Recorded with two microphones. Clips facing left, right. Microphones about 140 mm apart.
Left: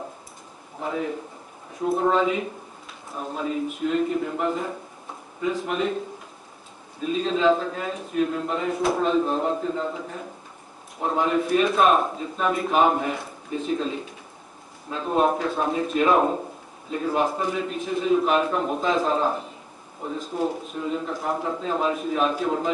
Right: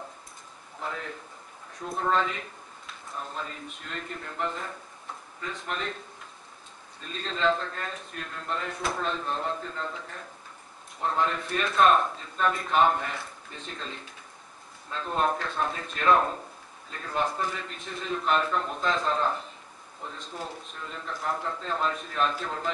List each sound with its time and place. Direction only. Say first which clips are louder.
0.7 s a man's voice: left 8 dB; 10° left (ahead or behind)
7.0 s speech: left 8 dB; 5° left (ahead or behind)